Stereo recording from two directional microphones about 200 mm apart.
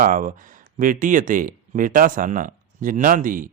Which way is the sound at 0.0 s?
40° right (ahead or behind).